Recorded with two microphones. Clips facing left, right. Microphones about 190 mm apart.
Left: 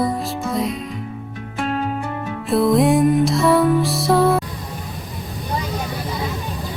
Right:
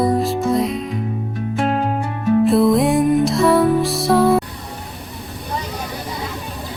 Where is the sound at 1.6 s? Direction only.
40° right (ahead or behind).